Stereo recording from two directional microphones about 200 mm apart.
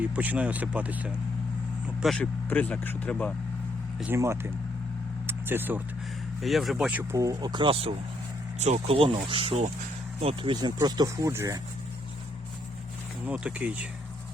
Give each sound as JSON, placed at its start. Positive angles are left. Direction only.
{"t": 0.0, "sound": "speech", "side_deg": -5}
{"t": 4.0, "sound": "speech", "side_deg": -10}
{"t": 5.2, "sound": "vehicle", "side_deg": -10}
{"t": 6.4, "sound": "speech", "side_deg": 0}
{"t": 7.1, "sound": "speech", "side_deg": -15}
{"t": 13.2, "sound": "speech", "side_deg": -5}